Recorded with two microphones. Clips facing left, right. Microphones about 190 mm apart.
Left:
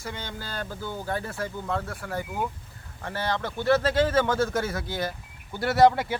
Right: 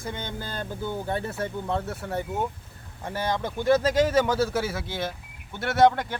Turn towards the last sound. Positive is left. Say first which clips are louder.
# left 1 dB
turn(degrees=5)  # may be behind; listen again after turning